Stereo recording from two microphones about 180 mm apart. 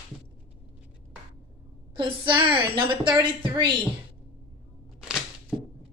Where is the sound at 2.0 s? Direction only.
25° right (ahead or behind).